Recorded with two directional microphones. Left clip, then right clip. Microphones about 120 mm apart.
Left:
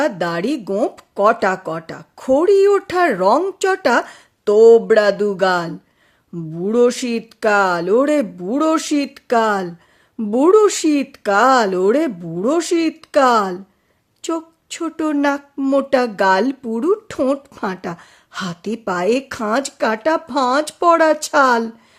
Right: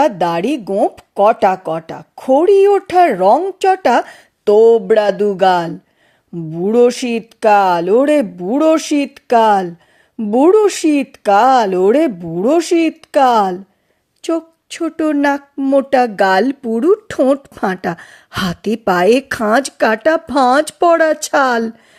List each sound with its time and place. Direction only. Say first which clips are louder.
0.0 s speech: right 5 dB; 25° right (ahead or behind)
0.7 s speech: right 4 dB; 15° right (ahead or behind)
3.3 s speech: right 3 dB; 5° right (ahead or behind)
3.7 s a woman's voice: right 5 dB; 20° right (ahead or behind)
15.5 s speech: right 5 dB; 15° right (ahead or behind)
15.8 s speech: right 4 dB; 25° right (ahead or behind)
17.6 s a woman's voice: right 6 dB; 45° right (ahead or behind)